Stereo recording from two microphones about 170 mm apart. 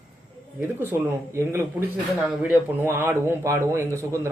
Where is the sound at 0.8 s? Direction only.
15° right (ahead or behind).